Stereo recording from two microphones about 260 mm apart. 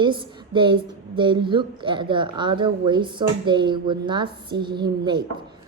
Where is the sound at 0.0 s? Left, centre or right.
Centre.